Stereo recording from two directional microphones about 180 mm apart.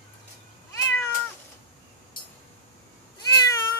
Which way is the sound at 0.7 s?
15° left (ahead or behind).